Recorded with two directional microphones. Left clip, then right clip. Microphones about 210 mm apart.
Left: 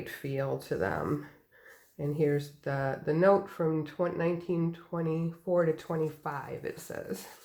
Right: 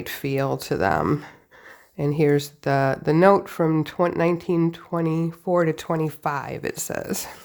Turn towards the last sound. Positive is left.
turn(degrees=-45)  # may be behind; listen again after turning